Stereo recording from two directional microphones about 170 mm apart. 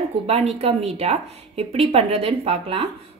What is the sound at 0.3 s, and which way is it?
A woman's voice, 40° right (ahead or behind).